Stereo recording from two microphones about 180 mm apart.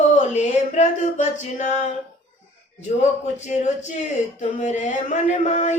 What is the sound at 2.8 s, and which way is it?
Speech, 40° left (ahead or behind).